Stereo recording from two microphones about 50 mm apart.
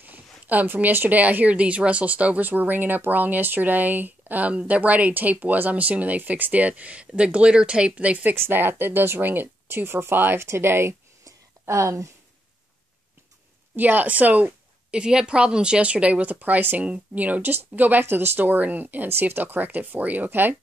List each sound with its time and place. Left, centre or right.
0.0 s a sound: right
0.9 s speech: right
4.5 s speech: right
8.4 s speech: right
11.6 s speech: right
13.7 s a woman's voice: right
18.0 s speech: right